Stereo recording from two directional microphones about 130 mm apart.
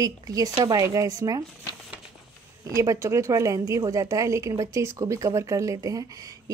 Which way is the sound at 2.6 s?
25° right (ahead or behind).